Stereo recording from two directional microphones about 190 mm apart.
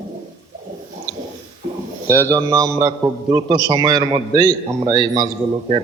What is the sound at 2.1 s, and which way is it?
Speech, 15° left (ahead or behind).